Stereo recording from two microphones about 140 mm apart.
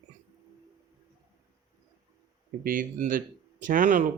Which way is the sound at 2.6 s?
80° right.